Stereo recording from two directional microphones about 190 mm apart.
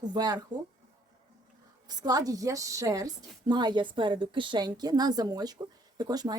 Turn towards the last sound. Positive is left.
turn(degrees=-20)  # may be behind; listen again after turning